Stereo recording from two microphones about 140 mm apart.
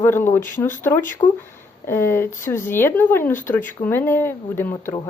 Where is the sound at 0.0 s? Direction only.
15° left (ahead or behind).